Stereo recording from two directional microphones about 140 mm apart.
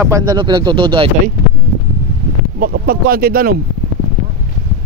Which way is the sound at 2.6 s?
90° right.